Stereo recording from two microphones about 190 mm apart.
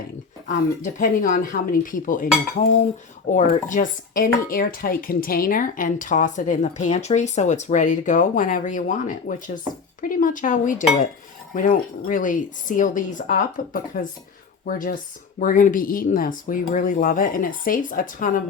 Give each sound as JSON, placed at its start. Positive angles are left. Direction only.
{"t": 0.9, "sound": "speech", "side_deg": 45}